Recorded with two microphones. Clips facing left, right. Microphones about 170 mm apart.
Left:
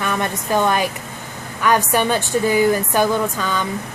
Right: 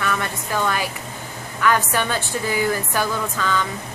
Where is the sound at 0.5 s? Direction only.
20° left (ahead or behind).